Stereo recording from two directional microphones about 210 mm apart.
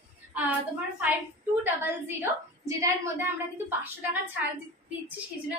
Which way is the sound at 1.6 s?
10° right (ahead or behind).